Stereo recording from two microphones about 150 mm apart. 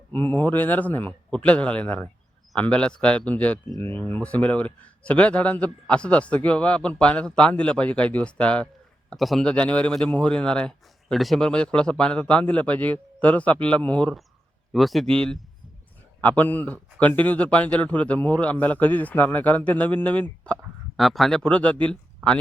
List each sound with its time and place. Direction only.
0.1 s a man's voice: 15° left (ahead or behind)